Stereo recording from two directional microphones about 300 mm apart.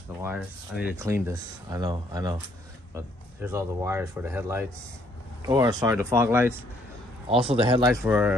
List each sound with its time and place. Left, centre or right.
0.2 s speech: centre
7.2 s speech: centre